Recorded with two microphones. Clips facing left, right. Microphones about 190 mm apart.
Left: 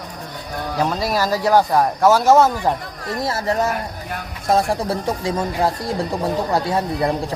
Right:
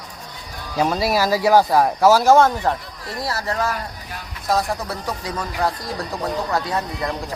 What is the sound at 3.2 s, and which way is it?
Speech, 25° left (ahead or behind).